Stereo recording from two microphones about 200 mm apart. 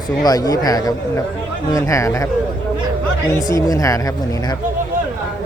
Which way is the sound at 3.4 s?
20° left (ahead or behind).